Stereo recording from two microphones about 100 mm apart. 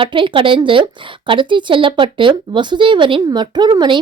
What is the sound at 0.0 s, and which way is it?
A woman's voice, 60° right (ahead or behind).